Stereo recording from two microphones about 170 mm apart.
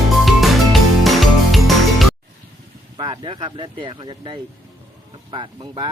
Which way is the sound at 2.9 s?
30° right (ahead or behind).